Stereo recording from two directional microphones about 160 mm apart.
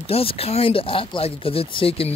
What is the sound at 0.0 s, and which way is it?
Speech, 35° left (ahead or behind).